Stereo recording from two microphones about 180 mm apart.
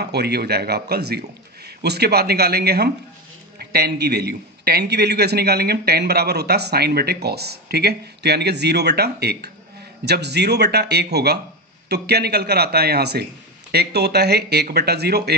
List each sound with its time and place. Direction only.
0.0 s a man's voice: 65° right (ahead or behind)